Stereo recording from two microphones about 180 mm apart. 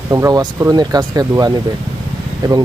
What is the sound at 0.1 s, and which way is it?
Speech, 20° right (ahead or behind).